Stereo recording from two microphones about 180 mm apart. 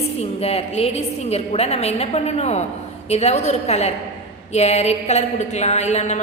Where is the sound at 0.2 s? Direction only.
35° left (ahead or behind).